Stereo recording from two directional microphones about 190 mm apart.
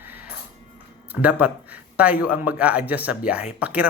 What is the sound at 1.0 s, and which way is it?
A man's voice, 10° right (ahead or behind).